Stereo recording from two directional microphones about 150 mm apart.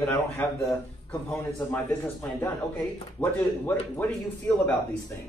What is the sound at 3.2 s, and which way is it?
Speech, 5° left (ahead or behind).